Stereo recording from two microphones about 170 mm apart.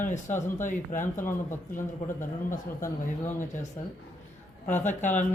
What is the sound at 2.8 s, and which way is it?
Speech, 15° left (ahead or behind).